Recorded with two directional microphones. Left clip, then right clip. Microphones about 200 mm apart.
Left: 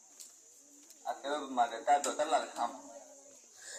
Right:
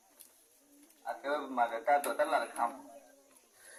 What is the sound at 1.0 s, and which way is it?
A man's voice, 10° left (ahead or behind).